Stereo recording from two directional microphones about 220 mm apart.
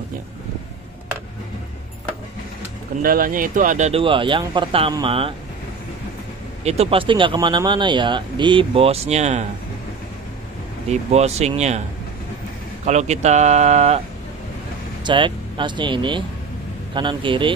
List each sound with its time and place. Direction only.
3.0 s speech: 40° right (ahead or behind); by 5.3 s 25° right (ahead or behind)
6.6 s speech: 30° right (ahead or behind)
10.9 s speech: 30° right (ahead or behind)
12.8 s speech: 30° right (ahead or behind)
15.0 s speech: 20° right (ahead or behind)